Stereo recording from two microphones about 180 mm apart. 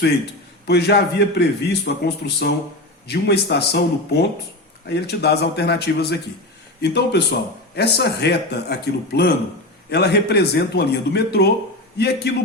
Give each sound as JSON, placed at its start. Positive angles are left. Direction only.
{"t": 0.7, "sound": "a man's voice", "side_deg": 65}